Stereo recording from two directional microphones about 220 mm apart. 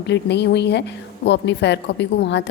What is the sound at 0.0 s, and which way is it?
A woman's voice, 50° left (ahead or behind).